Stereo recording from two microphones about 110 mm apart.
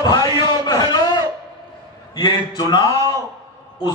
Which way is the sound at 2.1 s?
40° left (ahead or behind).